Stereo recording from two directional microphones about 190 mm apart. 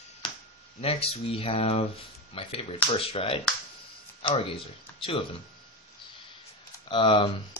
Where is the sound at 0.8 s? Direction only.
30° left (ahead or behind).